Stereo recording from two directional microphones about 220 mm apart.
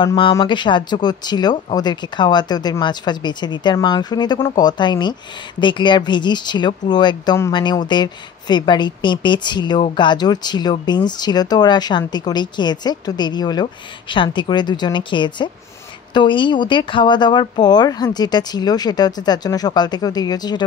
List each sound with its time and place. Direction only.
0.0 s speech: 20° left (ahead or behind)